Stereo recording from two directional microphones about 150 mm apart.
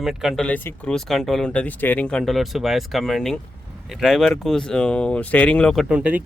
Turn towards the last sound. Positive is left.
turn(degrees=-10)  # may be behind; listen again after turning